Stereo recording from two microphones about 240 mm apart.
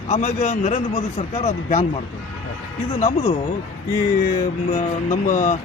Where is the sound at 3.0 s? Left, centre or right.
Left.